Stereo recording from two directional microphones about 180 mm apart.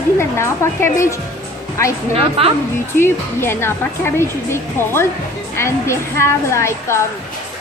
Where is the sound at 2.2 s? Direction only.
30° right (ahead or behind).